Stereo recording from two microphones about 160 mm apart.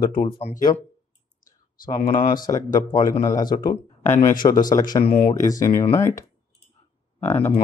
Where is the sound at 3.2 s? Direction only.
20° left (ahead or behind).